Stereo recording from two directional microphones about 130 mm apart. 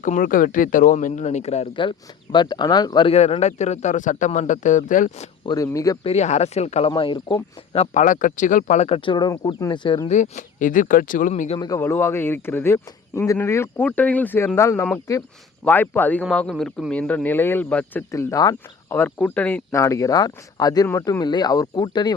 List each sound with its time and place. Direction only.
0.0 s speech: 85° left; by 1.6 s 60° left (ahead or behind)
1.7 s speech: 40° left (ahead or behind)
3.1 s a man's voice: 50° left (ahead or behind); by 5.3 s 75° left (ahead or behind)
5.6 s speech: 25° left (ahead or behind)
6.0 s a man's voice: 55° left (ahead or behind)
6.9 s speech: 40° left (ahead or behind)
7.9 s speech: 80° left
8.9 s speech: 35° left (ahead or behind)
10.1 s speech: 70° left (ahead or behind)
11.7 s speech: 20° left (ahead or behind)
18.1 s speech: 25° left (ahead or behind)
18.9 s speech: 15° left (ahead or behind)
19.7 s speech: 25° left (ahead or behind)